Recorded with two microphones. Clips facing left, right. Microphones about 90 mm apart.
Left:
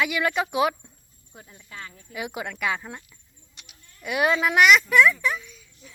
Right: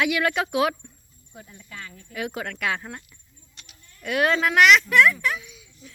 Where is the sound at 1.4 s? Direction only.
20° left (ahead or behind).